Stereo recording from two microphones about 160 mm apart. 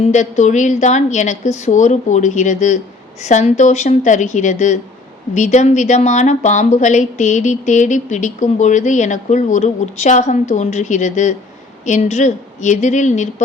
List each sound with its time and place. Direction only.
0.0 s a woman's voice: 45° left (ahead or behind)